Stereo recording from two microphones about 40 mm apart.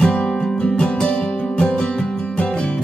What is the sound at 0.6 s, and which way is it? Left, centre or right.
Music, left.